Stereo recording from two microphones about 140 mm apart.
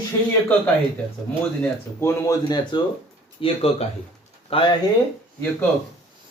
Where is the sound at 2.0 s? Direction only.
25° left (ahead or behind).